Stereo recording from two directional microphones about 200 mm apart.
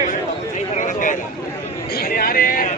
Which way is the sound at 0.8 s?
40° left (ahead or behind).